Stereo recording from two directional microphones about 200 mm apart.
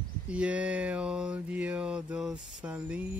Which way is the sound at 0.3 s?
5° right (ahead or behind).